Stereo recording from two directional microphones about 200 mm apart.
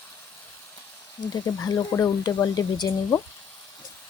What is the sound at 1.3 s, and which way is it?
Speech, 20° left (ahead or behind).